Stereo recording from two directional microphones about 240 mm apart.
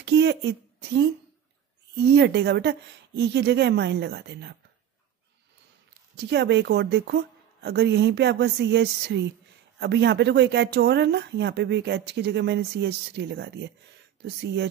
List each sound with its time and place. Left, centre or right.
0.0 s speech: right
6.1 s speech: right